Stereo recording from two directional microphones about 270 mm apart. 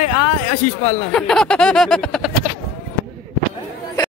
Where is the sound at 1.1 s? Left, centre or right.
Centre.